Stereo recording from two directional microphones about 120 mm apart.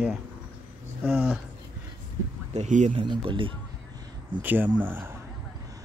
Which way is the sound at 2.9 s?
45° right (ahead or behind).